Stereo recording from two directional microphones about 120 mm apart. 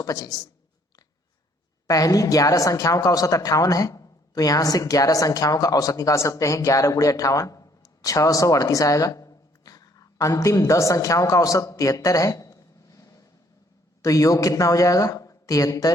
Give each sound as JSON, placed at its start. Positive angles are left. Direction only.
{"t": 0.0, "sound": "speech", "side_deg": 30}
{"t": 1.9, "sound": "a woman's voice", "side_deg": 30}